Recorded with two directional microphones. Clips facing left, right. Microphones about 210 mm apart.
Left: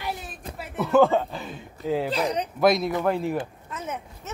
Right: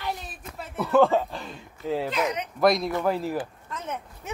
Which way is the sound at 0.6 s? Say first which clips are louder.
Left 1 dB; 5° left (ahead or behind).